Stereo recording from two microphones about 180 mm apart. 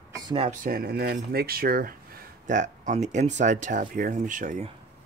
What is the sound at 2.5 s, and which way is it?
Speech, 45° right (ahead or behind).